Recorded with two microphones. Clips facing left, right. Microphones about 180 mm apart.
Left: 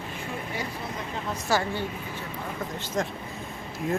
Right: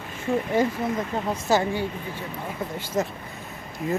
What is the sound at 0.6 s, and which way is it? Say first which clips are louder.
Speech: right 14 dB; 45° right (ahead or behind).